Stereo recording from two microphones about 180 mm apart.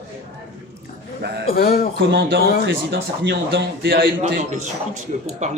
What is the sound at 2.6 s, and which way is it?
A man's voice, 75° right (ahead or behind).